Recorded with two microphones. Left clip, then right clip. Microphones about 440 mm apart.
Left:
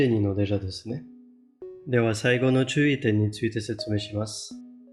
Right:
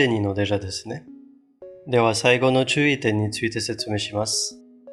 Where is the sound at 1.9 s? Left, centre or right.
Centre.